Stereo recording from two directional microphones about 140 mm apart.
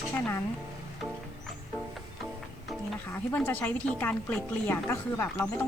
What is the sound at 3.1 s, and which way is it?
A woman's voice, 15° left (ahead or behind).